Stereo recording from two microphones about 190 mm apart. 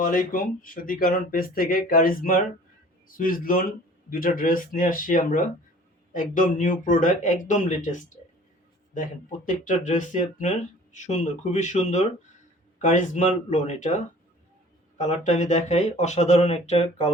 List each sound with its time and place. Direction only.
0.0 s speech: 45° left (ahead or behind)
9.5 s speech: 45° left (ahead or behind)